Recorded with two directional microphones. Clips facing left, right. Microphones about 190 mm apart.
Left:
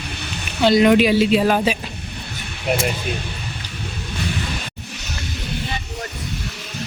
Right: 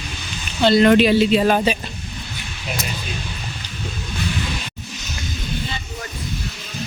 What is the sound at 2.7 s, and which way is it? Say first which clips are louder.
Speech: left 8 dB; 60° left (ahead or behind).